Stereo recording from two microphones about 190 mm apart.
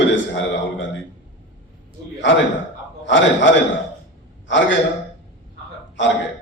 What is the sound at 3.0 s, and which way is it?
A man's voice, 80° left.